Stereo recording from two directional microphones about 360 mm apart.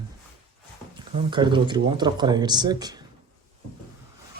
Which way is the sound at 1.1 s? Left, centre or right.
Centre.